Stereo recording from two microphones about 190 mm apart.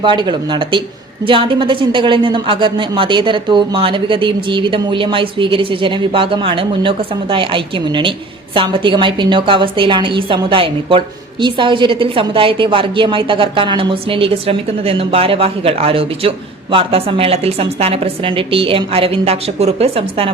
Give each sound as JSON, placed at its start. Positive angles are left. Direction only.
{"t": 0.0, "sound": "a woman's voice", "side_deg": -25}